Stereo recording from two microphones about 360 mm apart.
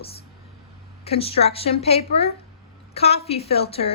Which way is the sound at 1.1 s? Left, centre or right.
Centre.